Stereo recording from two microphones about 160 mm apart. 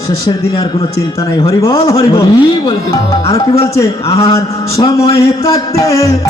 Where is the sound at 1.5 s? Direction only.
20° left (ahead or behind).